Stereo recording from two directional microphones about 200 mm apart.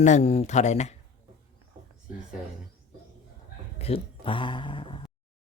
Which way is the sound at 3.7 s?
30° left (ahead or behind).